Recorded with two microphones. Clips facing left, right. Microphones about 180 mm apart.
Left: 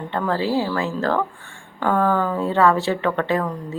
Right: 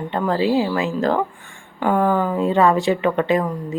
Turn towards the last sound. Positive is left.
turn(degrees=-15)  # may be behind; listen again after turning